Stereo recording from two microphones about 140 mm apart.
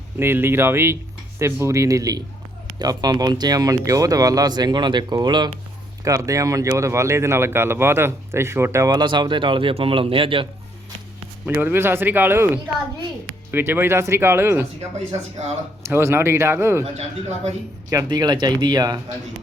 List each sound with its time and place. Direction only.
0.2 s speech: 15° right (ahead or behind); by 10.5 s 40° right (ahead or behind)
11.4 s speech: 15° right (ahead or behind)
13.5 s speech: 15° right (ahead or behind)
14.9 s speech: 50° right (ahead or behind)
15.9 s speech: 15° right (ahead or behind)
16.8 s speech: 55° right (ahead or behind)
17.9 s speech: 30° right (ahead or behind)